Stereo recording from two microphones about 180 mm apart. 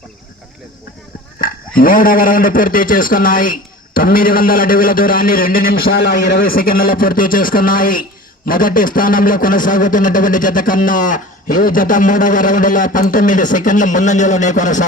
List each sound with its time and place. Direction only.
1.8 s a man's voice: 50° left (ahead or behind)